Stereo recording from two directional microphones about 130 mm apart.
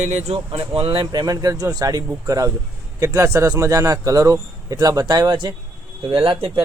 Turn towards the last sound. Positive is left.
turn(degrees=-45)  # may be behind; listen again after turning